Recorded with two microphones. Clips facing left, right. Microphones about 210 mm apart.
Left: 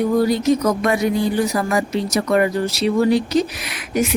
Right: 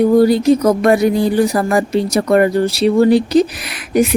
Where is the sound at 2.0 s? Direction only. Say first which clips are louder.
Right 4 dB; 30° right (ahead or behind).